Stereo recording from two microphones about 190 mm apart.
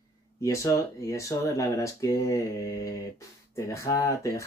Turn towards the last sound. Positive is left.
turn(degrees=15)  # may be behind; listen again after turning